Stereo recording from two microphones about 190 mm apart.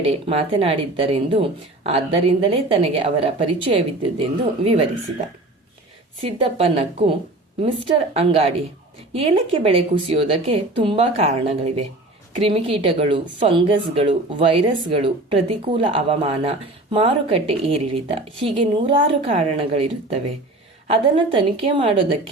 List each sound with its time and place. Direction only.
0.0 s a woman's voice: 30° right (ahead or behind)
6.2 s a woman's voice: 30° right (ahead or behind)